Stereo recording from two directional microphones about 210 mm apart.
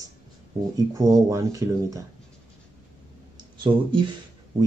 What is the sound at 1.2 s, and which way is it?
Speech, 15° right (ahead or behind).